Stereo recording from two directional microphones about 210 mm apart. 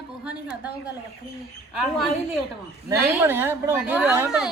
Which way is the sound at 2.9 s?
10° right (ahead or behind).